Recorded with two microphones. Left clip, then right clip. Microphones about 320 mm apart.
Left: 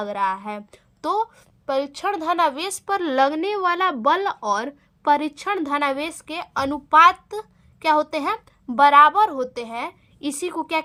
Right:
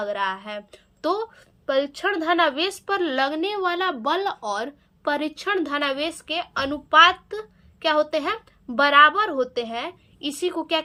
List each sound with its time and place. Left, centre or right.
0.0 s a woman's voice: centre